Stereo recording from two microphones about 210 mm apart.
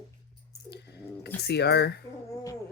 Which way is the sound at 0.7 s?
50° left (ahead or behind).